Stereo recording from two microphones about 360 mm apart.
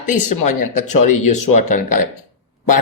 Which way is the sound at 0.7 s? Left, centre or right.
Left.